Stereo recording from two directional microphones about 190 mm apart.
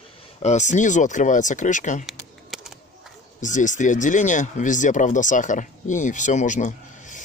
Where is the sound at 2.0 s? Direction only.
Centre (ahead or behind).